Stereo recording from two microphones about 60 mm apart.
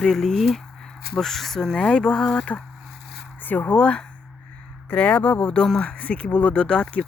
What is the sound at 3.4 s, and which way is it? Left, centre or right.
Speech, left.